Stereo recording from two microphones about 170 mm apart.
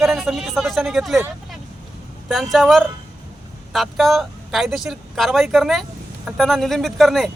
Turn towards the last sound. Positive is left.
turn(degrees=0)  # may be behind; listen again after turning